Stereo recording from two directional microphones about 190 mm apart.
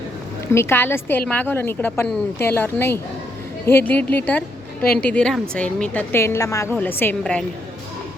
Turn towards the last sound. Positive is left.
turn(degrees=10)  # may be behind; listen again after turning